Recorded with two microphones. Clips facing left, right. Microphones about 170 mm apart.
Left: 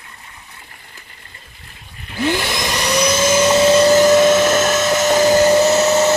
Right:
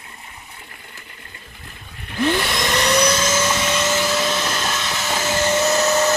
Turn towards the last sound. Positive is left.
turn(degrees=25)  # may be behind; listen again after turning